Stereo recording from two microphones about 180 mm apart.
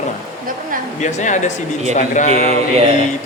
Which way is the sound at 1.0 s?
40° left (ahead or behind).